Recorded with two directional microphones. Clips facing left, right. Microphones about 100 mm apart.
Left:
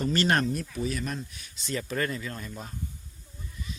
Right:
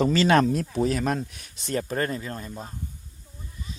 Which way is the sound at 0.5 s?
65° right (ahead or behind).